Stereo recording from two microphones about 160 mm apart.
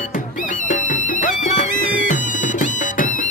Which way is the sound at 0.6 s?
55° left (ahead or behind).